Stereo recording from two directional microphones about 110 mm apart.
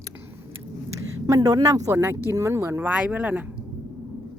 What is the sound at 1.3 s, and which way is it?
Speech, 35° right (ahead or behind).